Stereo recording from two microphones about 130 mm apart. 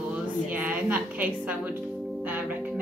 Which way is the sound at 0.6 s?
10° right (ahead or behind).